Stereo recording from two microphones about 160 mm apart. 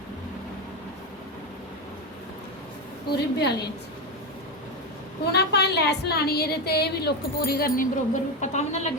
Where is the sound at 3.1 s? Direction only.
90° left.